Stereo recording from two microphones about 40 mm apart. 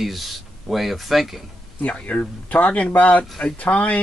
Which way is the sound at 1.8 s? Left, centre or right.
Left.